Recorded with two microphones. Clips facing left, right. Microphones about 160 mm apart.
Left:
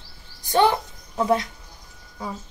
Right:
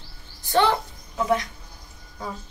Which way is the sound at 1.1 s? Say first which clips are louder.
Left 2 dB; 30° left (ahead or behind).